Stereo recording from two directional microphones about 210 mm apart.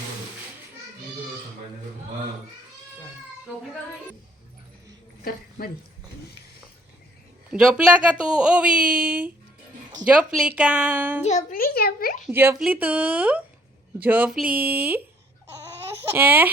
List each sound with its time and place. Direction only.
5.2 s speech: 45° left (ahead or behind)
7.5 s a woman's voice: 5° right (ahead or behind)
11.2 s a child's voice: 30° left (ahead or behind)
12.3 s a woman's voice: 10° right (ahead or behind)
16.1 s a woman's voice: 10° right (ahead or behind)